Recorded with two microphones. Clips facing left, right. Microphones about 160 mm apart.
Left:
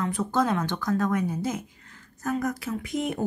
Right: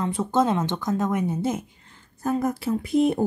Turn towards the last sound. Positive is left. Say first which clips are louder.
# right 8 dB
turn(degrees=-30)  # may be behind; listen again after turning